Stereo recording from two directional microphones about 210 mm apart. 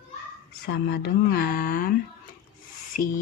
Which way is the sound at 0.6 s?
50° left (ahead or behind).